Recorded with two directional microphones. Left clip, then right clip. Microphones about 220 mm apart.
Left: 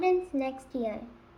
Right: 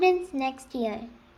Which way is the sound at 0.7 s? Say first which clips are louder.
Right 3 dB; 45° right (ahead or behind).